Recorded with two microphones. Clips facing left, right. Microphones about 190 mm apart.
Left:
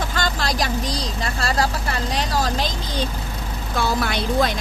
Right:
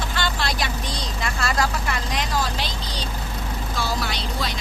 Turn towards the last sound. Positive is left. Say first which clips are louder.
# left 8 dB
turn(degrees=55)  # may be behind; listen again after turning